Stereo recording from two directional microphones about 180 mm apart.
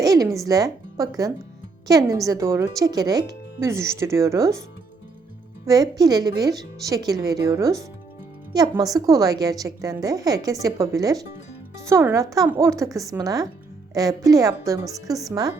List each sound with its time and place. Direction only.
0.0 s a woman's voice: 20° right (ahead or behind)
5.6 s a woman's voice: 20° right (ahead or behind)
8.7 s a woman's voice: 20° right (ahead or behind)